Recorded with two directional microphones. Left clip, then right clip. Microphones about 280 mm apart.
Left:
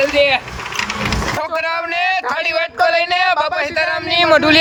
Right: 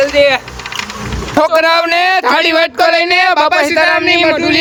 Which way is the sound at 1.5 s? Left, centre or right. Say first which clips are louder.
Right 10 dB; centre.